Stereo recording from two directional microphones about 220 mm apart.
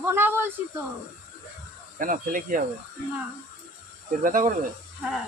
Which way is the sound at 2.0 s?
40° right (ahead or behind).